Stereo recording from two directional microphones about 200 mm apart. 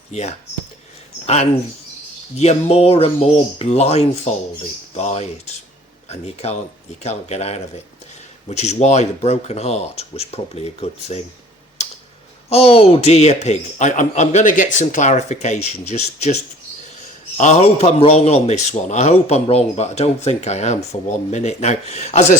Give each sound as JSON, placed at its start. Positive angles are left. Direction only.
{"t": 0.1, "sound": "a man's voice", "side_deg": 35}
{"t": 2.3, "sound": "a man's voice", "side_deg": 30}
{"t": 12.5, "sound": "a man's voice", "side_deg": 30}